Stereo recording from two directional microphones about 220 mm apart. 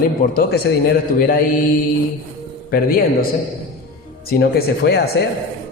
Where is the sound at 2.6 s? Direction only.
40° left (ahead or behind).